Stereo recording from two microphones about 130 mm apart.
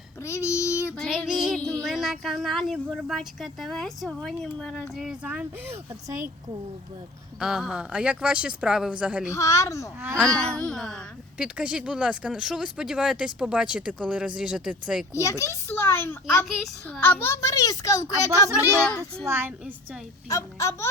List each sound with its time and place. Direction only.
0.2 s child singing: 20° left (ahead or behind)
1.1 s child singing: 5° right (ahead or behind)
1.7 s speech: centre (ahead or behind); by 6.1 s 20° right (ahead or behind)
7.3 s speech: 5° right (ahead or behind)
9.3 s a child's voice: 25° left (ahead or behind)
10.0 s speech: 10° right (ahead or behind)
10.2 s speech: 5° left (ahead or behind)
11.3 s speech: 10° right (ahead or behind)
15.1 s a child's voice: 25° left (ahead or behind)
18.3 s a child's voice: 25° right (ahead or behind)
20.2 s a child's voice: 25° left (ahead or behind)